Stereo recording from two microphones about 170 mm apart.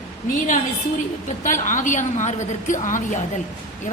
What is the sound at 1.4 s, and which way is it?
A woman's voice, 50° left (ahead or behind).